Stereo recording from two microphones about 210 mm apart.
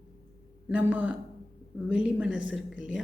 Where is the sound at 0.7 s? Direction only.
5° right (ahead or behind).